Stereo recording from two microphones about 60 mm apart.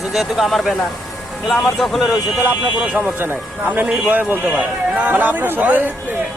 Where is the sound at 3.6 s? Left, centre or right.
Right.